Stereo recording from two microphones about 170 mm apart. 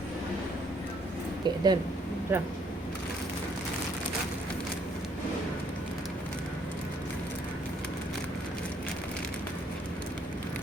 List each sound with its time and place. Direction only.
1.5 s speech: 25° right (ahead or behind)
2.3 s speech: 10° right (ahead or behind)